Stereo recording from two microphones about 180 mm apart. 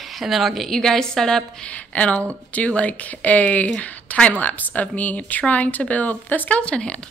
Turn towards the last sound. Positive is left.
turn(degrees=5)  # may be behind; listen again after turning